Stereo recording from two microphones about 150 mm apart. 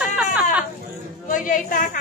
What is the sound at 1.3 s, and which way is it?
Speech, 60° left (ahead or behind).